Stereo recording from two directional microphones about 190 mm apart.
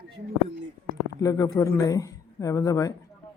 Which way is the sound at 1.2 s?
15° left (ahead or behind).